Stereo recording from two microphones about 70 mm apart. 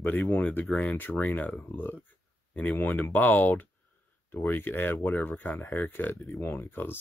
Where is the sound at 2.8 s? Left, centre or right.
Left.